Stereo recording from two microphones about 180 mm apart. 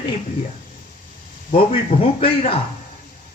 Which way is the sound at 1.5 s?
30° left (ahead or behind).